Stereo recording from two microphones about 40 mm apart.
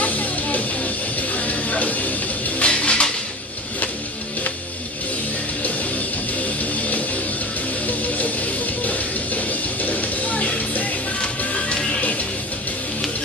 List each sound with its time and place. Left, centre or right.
0.0 s music: left
2.6 s a sound: left
6.6 s music: left
11.7 s music: left